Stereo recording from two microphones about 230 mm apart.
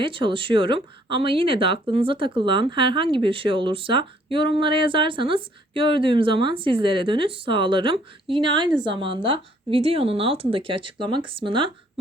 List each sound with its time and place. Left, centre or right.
0.0 s speech: right